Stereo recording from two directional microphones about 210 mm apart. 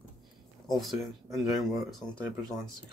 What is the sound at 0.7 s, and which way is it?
Speech, centre (ahead or behind).